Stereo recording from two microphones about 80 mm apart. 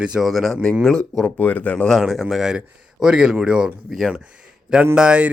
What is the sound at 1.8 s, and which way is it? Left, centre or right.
A man's voice, centre.